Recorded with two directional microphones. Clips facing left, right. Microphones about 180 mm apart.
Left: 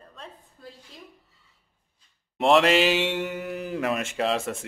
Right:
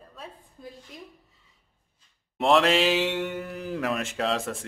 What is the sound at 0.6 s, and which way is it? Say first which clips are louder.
Speech: right 2 dB; 15° right (ahead or behind).